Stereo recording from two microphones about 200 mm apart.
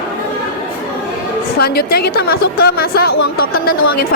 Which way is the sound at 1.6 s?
50° left (ahead or behind).